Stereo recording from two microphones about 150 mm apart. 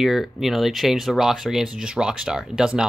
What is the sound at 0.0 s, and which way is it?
Speech, centre (ahead or behind).